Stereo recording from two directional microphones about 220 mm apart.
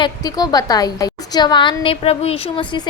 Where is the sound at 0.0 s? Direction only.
15° left (ahead or behind).